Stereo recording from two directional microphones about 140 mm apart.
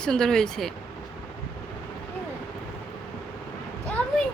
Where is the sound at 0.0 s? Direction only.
5° left (ahead or behind).